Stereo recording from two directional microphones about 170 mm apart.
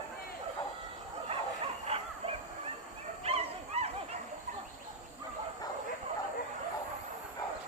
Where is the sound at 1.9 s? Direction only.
35° right (ahead or behind).